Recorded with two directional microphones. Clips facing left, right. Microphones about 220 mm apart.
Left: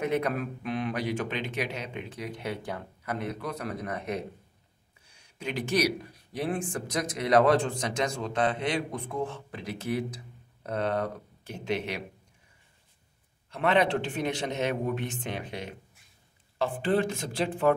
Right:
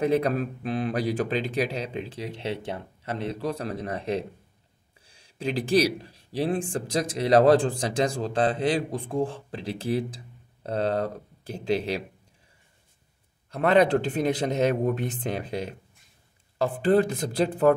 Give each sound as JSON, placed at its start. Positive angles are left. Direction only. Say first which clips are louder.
{"t": 0.0, "sound": "speech", "louder": "right 5 dB", "side_deg": -30}
{"t": 13.5, "sound": "speech", "louder": "right 5 dB", "side_deg": -40}